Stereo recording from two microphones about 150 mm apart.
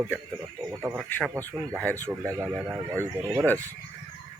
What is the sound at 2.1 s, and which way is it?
Speech, 10° right (ahead or behind).